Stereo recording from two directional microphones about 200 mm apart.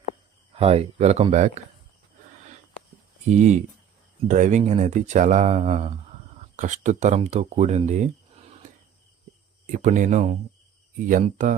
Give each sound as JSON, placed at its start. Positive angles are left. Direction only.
{"t": 0.5, "sound": "speech", "side_deg": -30}
{"t": 3.2, "sound": "speech", "side_deg": -35}
{"t": 9.7, "sound": "speech", "side_deg": -40}